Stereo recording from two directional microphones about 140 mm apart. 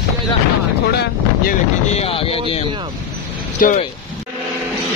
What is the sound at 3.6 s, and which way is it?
Speech, 75° left (ahead or behind).